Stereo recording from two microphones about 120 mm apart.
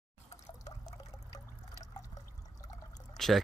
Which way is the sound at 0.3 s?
70° left (ahead or behind).